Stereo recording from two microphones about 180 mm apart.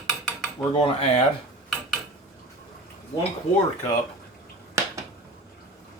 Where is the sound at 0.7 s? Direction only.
30° left (ahead or behind).